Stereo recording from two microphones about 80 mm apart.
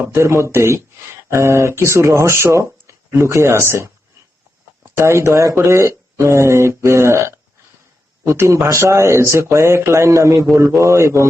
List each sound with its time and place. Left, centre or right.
0.0 s speech: right
4.9 s speech: right